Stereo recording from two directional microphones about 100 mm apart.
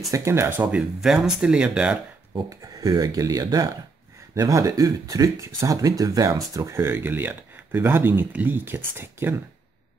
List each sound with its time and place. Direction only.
0.1 s speech: 30° right (ahead or behind); by 2.0 s 10° right (ahead or behind)
2.6 s speech: 40° right (ahead or behind); by 9.3 s 20° right (ahead or behind)